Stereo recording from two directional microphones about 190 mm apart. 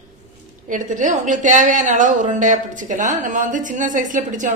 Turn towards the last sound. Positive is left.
turn(degrees=-40)  # may be behind; listen again after turning